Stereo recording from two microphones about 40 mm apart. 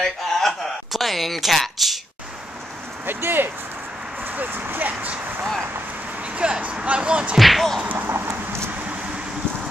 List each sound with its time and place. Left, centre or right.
0.0 s a sound: centre
3.1 s speech: right
5.0 s vehicle: right
6.3 s speech: right
7.3 s a sound: centre
8.1 s vehicle: right